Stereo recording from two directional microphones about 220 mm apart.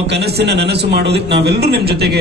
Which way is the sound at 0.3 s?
50° right (ahead or behind).